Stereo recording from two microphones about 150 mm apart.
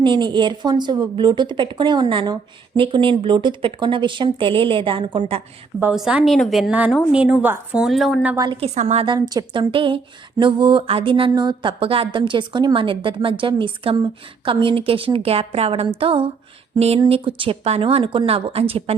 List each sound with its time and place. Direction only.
0.0 s speech: 30° right (ahead or behind)
5.8 s a woman's voice: 5° right (ahead or behind)
8.6 s a woman's voice: 50° right (ahead or behind)
9.0 s speech: 25° right (ahead or behind)